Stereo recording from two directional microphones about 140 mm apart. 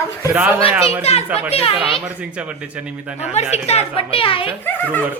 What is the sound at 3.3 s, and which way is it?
A woman's voice, 50° left (ahead or behind).